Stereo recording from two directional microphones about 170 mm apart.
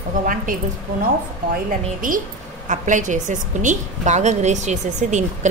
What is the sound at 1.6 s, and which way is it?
A woman's voice, 50° right (ahead or behind).